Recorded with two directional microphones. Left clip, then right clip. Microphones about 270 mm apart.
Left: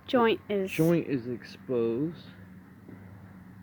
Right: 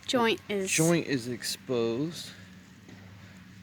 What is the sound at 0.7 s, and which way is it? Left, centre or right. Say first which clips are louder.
Speech: right 2 dB; right.